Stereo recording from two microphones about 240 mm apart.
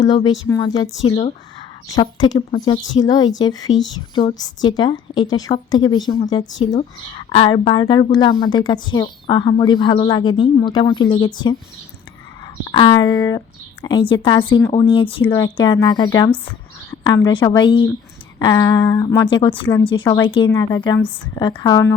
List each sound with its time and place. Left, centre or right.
0.0 s a woman's voice: centre
12.6 s a woman's voice: centre